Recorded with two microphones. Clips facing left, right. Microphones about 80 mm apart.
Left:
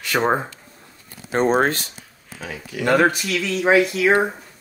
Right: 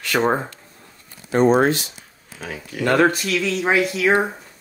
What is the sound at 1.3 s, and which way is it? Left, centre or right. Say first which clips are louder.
Speech: right 2 dB; left.